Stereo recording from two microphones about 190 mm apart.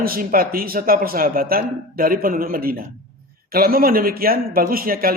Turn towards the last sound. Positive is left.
turn(degrees=-50)  # may be behind; listen again after turning